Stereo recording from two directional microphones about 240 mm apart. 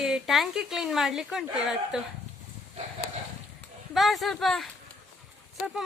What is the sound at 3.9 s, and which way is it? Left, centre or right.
Speech, centre.